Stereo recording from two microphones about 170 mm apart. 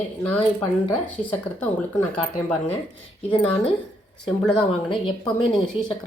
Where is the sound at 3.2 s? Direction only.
35° left (ahead or behind).